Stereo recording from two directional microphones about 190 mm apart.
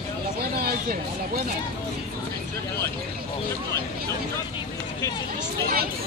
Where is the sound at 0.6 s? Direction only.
50° right (ahead or behind).